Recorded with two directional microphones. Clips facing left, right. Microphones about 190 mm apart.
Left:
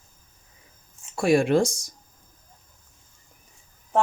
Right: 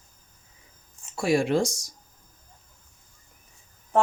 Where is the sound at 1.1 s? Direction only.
55° left (ahead or behind).